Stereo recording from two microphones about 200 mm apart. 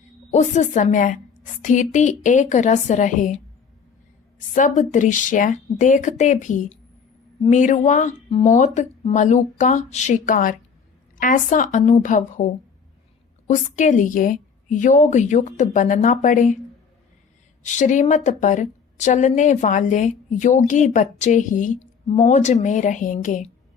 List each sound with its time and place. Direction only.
0.3 s a woman's voice: 35° left (ahead or behind)
13.5 s a woman's voice: 40° left (ahead or behind)
17.6 s a woman's voice: 40° left (ahead or behind)